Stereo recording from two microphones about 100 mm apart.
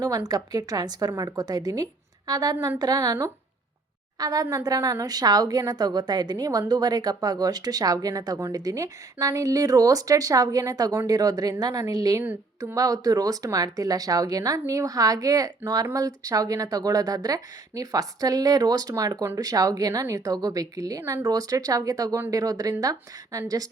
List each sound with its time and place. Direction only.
0.3 s speech: 40° right (ahead or behind)